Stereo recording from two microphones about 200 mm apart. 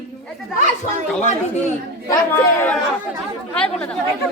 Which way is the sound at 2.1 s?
10° left (ahead or behind).